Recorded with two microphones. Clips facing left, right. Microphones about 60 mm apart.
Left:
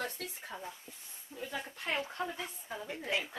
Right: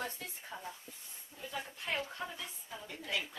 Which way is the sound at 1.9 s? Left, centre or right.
Left.